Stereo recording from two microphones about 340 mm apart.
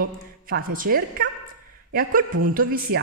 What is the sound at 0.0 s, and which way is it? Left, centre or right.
A woman's voice, right.